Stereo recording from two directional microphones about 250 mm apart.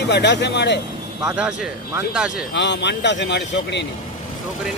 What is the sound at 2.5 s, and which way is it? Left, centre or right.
Speech, left.